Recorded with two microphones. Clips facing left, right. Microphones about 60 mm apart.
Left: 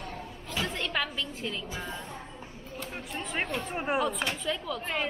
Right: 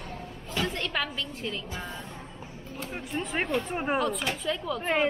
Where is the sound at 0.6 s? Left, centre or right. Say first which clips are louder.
Right 1 dB; centre.